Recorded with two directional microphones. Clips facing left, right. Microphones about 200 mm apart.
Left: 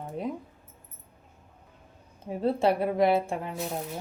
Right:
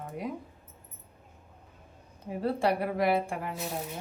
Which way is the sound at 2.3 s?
25° left (ahead or behind).